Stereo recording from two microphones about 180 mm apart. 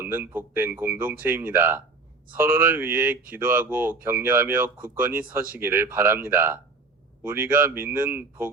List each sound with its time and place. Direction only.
0.0 s speech: 10° right (ahead or behind)